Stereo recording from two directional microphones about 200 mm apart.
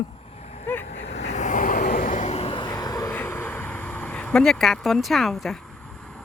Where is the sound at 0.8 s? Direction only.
35° left (ahead or behind); by 5.5 s centre (ahead or behind).